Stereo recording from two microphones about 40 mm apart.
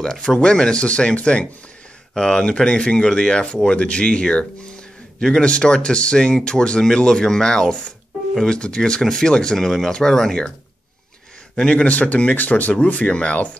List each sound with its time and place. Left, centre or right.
0.0 s speech: centre
0.4 s speech: left
9.6 s speech: centre
11.5 s speech: left